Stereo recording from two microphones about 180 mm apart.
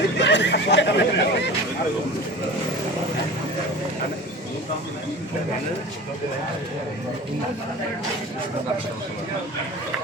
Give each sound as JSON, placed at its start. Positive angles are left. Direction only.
{"t": 0.2, "sound": "neigh", "side_deg": 75}